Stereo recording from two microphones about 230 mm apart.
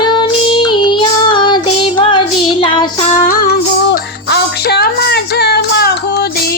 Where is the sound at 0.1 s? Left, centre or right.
Centre.